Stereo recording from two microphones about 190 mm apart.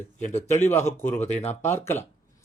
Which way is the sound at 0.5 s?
15° left (ahead or behind).